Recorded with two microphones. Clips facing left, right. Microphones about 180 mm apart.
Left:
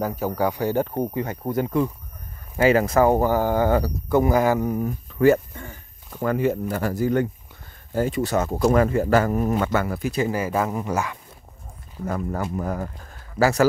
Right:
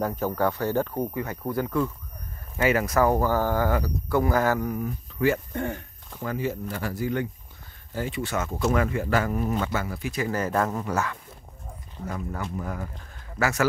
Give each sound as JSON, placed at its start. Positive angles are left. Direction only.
{"t": 0.0, "sound": "speech", "side_deg": 10}
{"t": 2.5, "sound": "speech", "side_deg": 30}
{"t": 4.8, "sound": "speech", "side_deg": 40}
{"t": 5.5, "sound": "speech", "side_deg": -65}
{"t": 6.2, "sound": "speech", "side_deg": 60}
{"t": 10.3, "sound": "speech", "side_deg": 5}
{"t": 12.1, "sound": "speech", "side_deg": 45}